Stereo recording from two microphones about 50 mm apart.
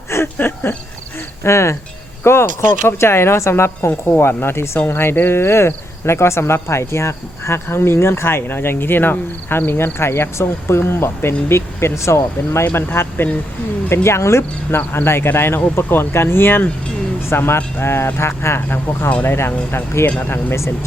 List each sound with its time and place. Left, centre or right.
0.3 s speech: left
1.5 s speech: left
2.2 s speech: left
12.6 s speech: left
13.9 s speech: left
14.8 s speech: left
17.2 s speech: left
19.0 s speech: left
19.4 s speech: left
20.1 s speech: left
20.5 s speech: left